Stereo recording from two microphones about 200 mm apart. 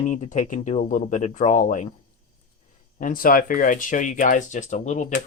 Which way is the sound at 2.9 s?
45° left (ahead or behind).